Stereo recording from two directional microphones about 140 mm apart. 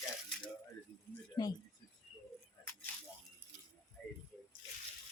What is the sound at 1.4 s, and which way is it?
Speech, 35° left (ahead or behind).